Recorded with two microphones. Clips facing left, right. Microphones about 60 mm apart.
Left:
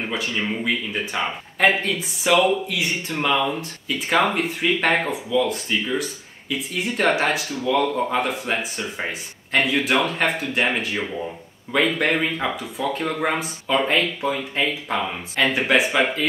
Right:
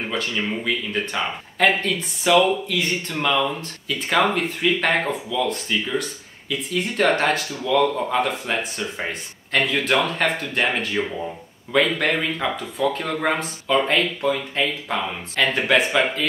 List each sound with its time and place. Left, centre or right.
0.0 s speech: centre